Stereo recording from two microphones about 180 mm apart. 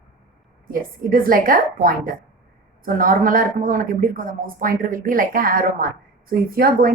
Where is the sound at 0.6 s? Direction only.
55° right (ahead or behind).